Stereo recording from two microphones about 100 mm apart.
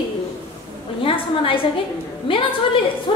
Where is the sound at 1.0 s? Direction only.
65° left (ahead or behind).